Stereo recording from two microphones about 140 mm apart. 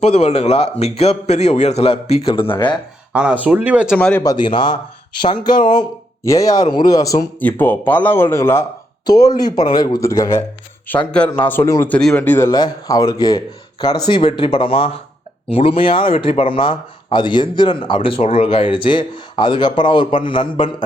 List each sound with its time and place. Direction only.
0.0 s a man's voice: 45° left (ahead or behind)
3.1 s speech: 10° right (ahead or behind)
3.9 s speech: 10° left (ahead or behind)
4.2 s speech: 30° left (ahead or behind)
6.2 s speech: 25° left (ahead or behind)
7.3 s speech: 15° left (ahead or behind)
9.0 s speech: 30° left (ahead or behind)
11.9 s speech: 5° left (ahead or behind)
12.5 s speech: 25° left (ahead or behind)